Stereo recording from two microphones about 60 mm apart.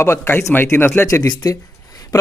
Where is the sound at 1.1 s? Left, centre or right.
Left.